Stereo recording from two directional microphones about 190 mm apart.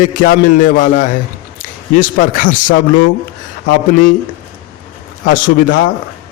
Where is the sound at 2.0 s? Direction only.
45° left (ahead or behind).